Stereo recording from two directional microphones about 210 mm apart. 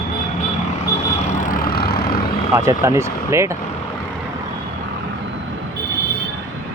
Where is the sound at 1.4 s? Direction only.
40° left (ahead or behind).